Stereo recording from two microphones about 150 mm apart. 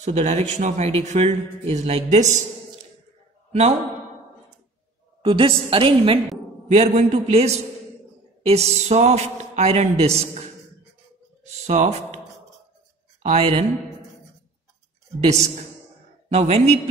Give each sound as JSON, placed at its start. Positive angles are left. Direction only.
{"t": 0.0, "sound": "speech", "side_deg": -50}
{"t": 5.2, "sound": "a woman's voice", "side_deg": -35}
{"t": 11.6, "sound": "speech", "side_deg": -45}
{"t": 13.2, "sound": "a woman's voice", "side_deg": -40}
{"t": 16.3, "sound": "speech", "side_deg": -45}